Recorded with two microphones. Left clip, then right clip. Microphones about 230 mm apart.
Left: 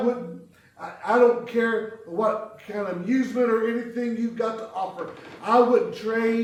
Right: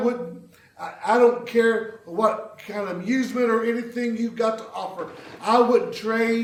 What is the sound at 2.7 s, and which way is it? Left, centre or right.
A man's voice, right.